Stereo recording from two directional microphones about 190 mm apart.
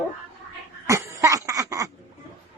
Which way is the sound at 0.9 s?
15° right (ahead or behind).